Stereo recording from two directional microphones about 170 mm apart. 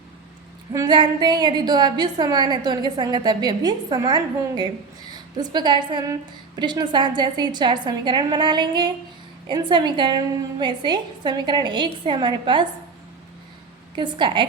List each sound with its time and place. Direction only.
0.7 s a woman's voice: 25° right (ahead or behind)
13.9 s a woman's voice: 25° right (ahead or behind)